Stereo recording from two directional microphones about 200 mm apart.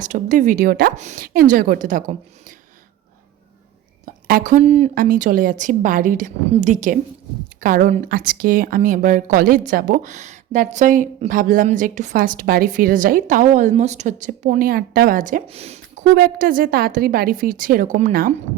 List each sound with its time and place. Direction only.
0.0 s a woman's voice: 40° right (ahead or behind)
0.9 s a woman's voice: 40° right (ahead or behind)
4.0 s a woman's voice: 45° right (ahead or behind)